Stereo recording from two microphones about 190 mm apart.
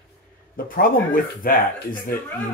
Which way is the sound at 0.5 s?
50° left (ahead or behind).